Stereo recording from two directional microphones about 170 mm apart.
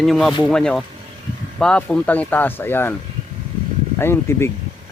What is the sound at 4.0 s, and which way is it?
Speech, 15° left (ahead or behind).